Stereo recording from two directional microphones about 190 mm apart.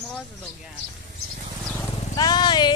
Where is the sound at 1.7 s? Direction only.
20° left (ahead or behind).